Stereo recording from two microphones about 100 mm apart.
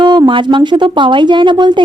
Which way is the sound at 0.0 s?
50° right (ahead or behind).